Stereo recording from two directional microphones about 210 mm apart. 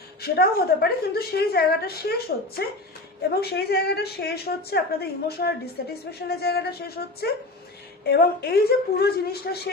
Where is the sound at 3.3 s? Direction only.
50° left (ahead or behind).